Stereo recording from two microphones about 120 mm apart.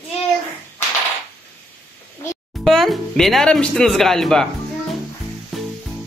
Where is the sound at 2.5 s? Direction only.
Centre (ahead or behind).